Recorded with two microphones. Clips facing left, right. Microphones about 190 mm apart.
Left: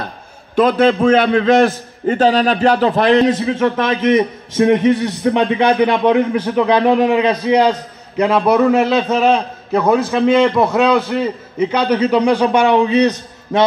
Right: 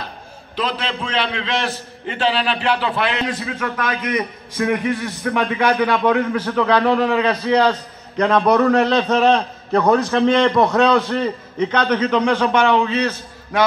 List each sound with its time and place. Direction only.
0.6 s a man's voice: 50° left (ahead or behind)
3.4 s a man's voice: 30° left (ahead or behind); by 11.2 s centre (ahead or behind)
11.6 s a man's voice: 10° left (ahead or behind)